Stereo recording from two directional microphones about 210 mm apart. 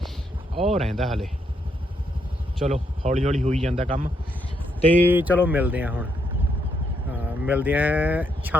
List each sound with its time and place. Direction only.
0.5 s speech: 30° right (ahead or behind)
0.9 s speech: centre (ahead or behind)
2.6 s speech: 30° right (ahead or behind)
5.0 s speech: 10° right (ahead or behind)
7.4 s speech: 10° right (ahead or behind)